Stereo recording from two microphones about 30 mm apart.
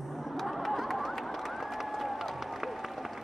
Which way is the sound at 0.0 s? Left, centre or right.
Centre.